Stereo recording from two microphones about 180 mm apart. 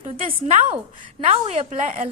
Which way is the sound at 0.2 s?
30° right (ahead or behind).